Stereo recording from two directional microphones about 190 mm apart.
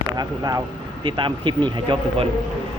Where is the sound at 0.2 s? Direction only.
20° right (ahead or behind).